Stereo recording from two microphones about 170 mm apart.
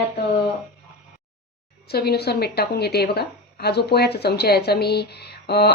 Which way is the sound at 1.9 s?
70° left (ahead or behind).